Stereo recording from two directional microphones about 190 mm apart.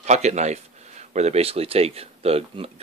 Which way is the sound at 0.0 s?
35° right (ahead or behind).